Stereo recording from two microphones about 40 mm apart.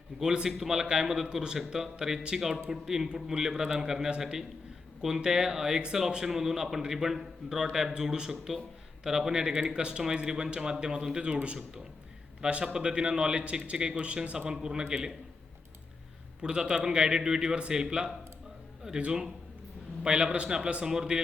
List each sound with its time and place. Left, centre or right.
0.2 s a man's voice: centre
7.9 s a man's voice: centre
14.3 s a man's voice: centre
16.4 s a man's voice: centre